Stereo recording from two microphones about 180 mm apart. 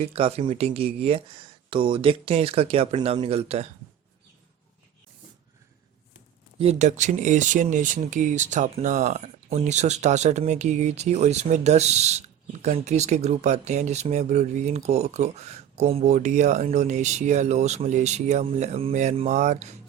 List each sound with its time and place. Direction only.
0.0 s speech: 35° right (ahead or behind)
6.6 s speech: 35° right (ahead or behind)